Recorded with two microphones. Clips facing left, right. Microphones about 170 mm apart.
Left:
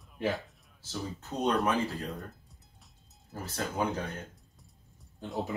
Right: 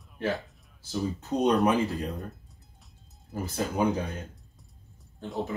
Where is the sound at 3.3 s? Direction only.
15° right (ahead or behind).